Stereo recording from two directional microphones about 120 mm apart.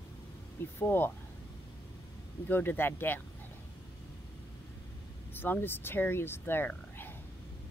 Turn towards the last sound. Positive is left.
turn(degrees=20)  # may be behind; listen again after turning